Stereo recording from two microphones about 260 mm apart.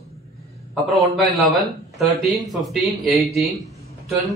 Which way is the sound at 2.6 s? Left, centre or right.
Centre.